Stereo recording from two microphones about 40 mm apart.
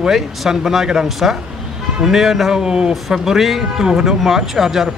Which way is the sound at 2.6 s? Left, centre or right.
Centre.